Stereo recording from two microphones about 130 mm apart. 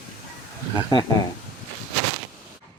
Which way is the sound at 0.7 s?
35° left (ahead or behind).